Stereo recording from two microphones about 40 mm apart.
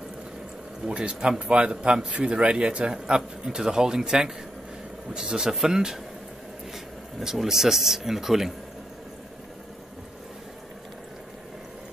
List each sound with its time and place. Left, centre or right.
0.8 s a man's voice: right
2.0 s a man's voice: right
2.3 s a man's voice: right
5.5 s speech: centre
7.2 s speech: centre